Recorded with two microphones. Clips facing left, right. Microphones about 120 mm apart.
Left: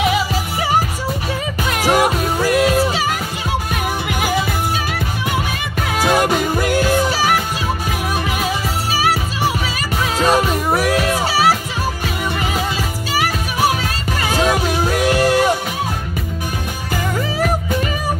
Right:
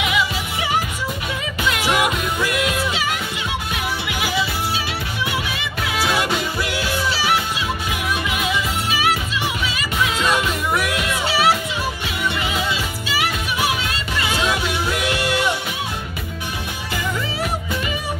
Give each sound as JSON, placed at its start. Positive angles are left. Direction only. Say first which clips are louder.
{"t": 0.0, "sound": "music", "louder": "left 4 dB", "side_deg": 40}
{"t": 13.1, "sound": "music", "louder": "left 3 dB", "side_deg": 40}